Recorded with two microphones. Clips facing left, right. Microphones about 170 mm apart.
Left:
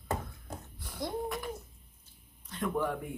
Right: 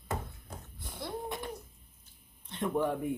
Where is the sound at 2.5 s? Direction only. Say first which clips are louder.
Right 1 dB; 25° right (ahead or behind).